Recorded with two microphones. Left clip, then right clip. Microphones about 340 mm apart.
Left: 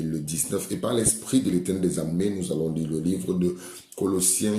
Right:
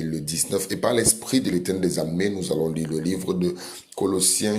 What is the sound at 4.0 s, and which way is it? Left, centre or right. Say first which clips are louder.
Speech: right 3 dB; centre.